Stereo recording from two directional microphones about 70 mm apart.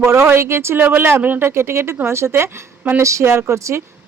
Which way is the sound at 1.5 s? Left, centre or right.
Right.